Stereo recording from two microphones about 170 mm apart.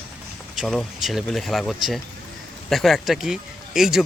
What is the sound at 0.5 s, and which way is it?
Speech, centre (ahead or behind).